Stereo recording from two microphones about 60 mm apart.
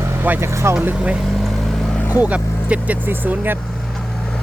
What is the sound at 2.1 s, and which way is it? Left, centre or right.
Speech, right.